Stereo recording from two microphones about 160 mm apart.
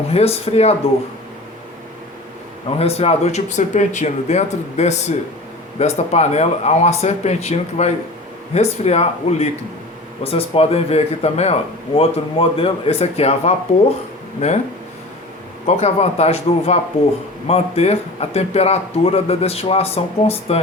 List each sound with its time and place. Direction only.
0.1 s speech: 40° left (ahead or behind)
2.7 s speech: 40° left (ahead or behind)
15.6 s speech: 40° left (ahead or behind)